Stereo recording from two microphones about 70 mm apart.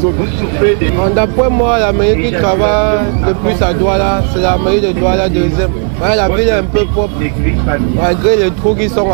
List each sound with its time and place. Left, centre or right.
0.6 s speech: right
8.0 s speech: centre